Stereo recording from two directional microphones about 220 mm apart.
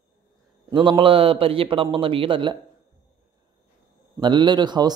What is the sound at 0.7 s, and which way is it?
A woman's voice, 20° right (ahead or behind).